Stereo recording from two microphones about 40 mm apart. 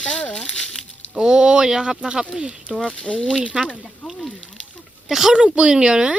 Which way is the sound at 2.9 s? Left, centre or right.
Left.